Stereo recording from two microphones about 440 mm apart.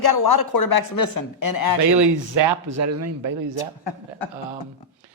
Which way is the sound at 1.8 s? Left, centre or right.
Right.